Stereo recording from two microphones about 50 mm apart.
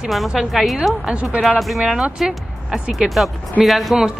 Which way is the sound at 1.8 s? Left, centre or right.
Centre.